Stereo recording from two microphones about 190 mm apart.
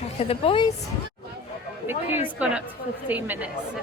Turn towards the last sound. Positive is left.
turn(degrees=-10)  # may be behind; listen again after turning